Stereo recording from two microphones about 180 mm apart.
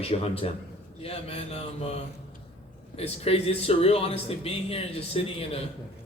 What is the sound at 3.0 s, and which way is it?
A man's voice, 35° left (ahead or behind).